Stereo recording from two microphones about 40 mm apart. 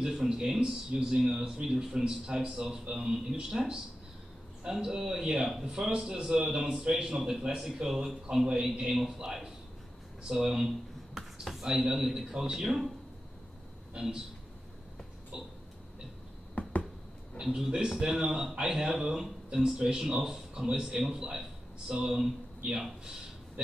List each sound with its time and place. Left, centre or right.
0.0 s a man's voice: centre
14.0 s a man's voice: right
15.3 s a man's voice: centre
16.6 s a sound: left
17.6 s a man's voice: centre
20.5 s speech: right
20.8 s a man's voice: centre